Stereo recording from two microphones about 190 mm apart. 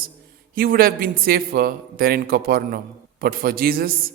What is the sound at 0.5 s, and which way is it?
A man's voice, 50° right (ahead or behind).